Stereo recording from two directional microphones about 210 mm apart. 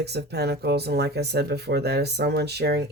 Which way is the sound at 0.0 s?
50° right (ahead or behind).